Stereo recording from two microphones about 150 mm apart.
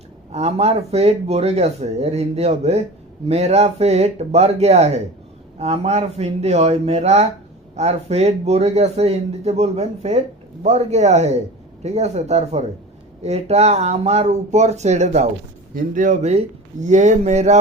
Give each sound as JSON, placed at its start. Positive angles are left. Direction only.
{"t": 0.3, "sound": "speech", "side_deg": -45}